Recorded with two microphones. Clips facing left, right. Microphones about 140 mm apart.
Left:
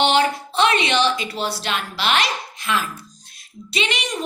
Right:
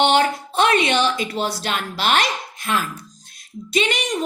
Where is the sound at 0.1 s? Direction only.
50° right (ahead or behind).